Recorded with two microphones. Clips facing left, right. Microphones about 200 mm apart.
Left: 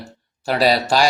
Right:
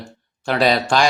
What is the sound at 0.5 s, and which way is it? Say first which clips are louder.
Speech: even; 35° left (ahead or behind).